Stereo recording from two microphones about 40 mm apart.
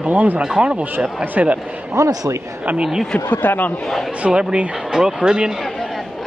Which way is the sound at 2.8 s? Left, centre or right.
Centre.